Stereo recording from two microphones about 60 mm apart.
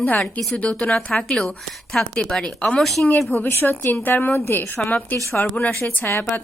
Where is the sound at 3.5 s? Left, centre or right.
Left.